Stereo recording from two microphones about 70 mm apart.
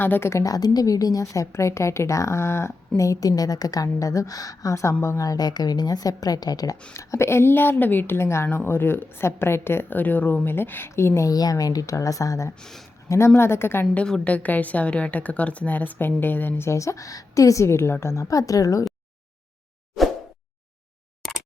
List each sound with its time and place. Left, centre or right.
0.0 s a woman's voice: left
0.4 s a woman's voice: left
3.0 s a woman's voice: left
6.9 s a woman's voice: left
11.3 s a woman's voice: left
12.5 s speech: centre
13.1 s a woman's voice: left
13.9 s a woman's voice: centre
16.6 s a woman's voice: left